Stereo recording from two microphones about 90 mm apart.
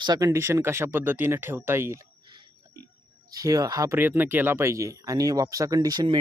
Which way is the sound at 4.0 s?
25° right (ahead or behind).